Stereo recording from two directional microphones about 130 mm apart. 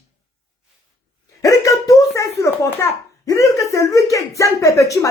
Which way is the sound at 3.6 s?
25° left (ahead or behind).